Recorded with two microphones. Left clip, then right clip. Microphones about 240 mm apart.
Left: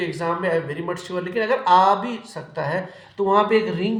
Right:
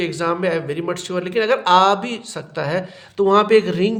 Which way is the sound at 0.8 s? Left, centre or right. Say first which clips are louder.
Right 4 dB; right.